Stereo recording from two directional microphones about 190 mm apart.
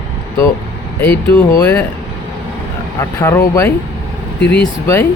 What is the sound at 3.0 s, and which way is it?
Speech, 15° left (ahead or behind).